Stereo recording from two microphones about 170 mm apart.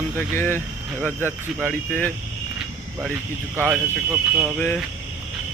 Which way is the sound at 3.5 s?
10° right (ahead or behind).